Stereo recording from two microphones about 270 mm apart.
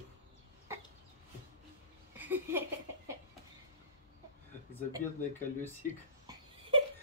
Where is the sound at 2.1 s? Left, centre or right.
Centre.